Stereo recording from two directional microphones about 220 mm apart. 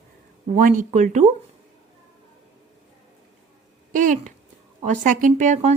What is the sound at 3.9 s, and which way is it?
Speech, 35° right (ahead or behind).